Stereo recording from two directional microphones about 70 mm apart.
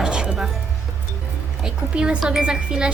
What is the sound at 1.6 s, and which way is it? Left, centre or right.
Speech, centre.